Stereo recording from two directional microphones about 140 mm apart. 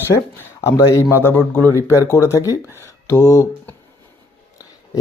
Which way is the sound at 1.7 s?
20° right (ahead or behind).